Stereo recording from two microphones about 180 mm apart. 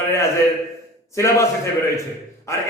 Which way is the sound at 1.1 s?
15° left (ahead or behind).